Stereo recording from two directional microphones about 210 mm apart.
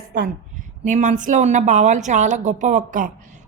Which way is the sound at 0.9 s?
35° right (ahead or behind).